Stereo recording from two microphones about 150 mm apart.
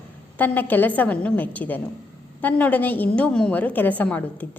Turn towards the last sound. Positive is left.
turn(degrees=10)  # may be behind; listen again after turning